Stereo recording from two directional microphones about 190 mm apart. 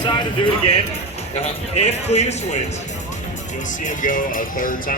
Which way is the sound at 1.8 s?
35° left (ahead or behind).